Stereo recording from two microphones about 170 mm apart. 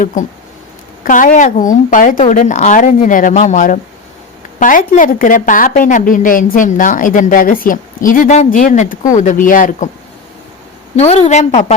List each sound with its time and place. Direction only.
0.0 s a woman's voice: 50° left (ahead or behind)
4.9 s a woman's voice: 50° left (ahead or behind)
10.9 s a woman's voice: 40° left (ahead or behind)